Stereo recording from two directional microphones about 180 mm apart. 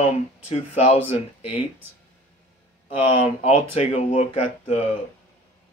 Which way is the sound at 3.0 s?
35° left (ahead or behind).